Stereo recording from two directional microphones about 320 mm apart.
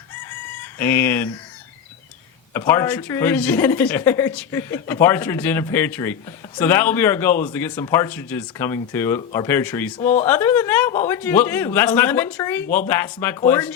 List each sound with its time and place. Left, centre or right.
0.6 s speech: centre
2.5 s a man's voice: centre
10.0 s speech: left
10.2 s a man's voice: centre